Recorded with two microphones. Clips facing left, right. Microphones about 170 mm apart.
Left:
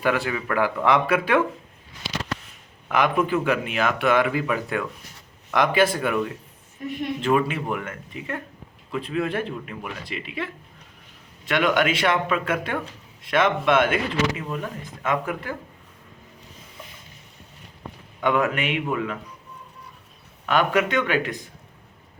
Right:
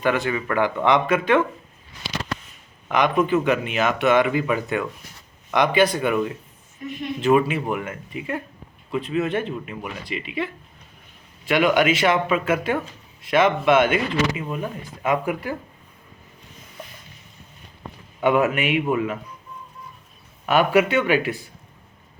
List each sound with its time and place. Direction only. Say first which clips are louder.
0.0 s speech: right 2 dB; 5° left (ahead or behind)
2.9 s speech: right 2 dB; 5° left (ahead or behind); by 15.5 s 15° right (ahead or behind)
18.2 s speech: right 3 dB; 15° right (ahead or behind)
20.5 s speech: right 3 dB; 10° right (ahead or behind)